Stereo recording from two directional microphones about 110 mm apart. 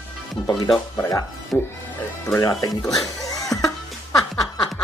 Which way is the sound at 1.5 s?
20° left (ahead or behind).